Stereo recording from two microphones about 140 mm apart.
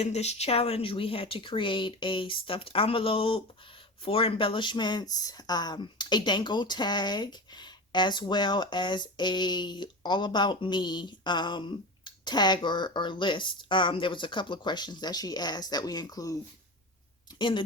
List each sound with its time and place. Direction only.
0.0 s speech: 50° left (ahead or behind); by 16.4 s 25° left (ahead or behind)
17.3 s speech: 35° left (ahead or behind)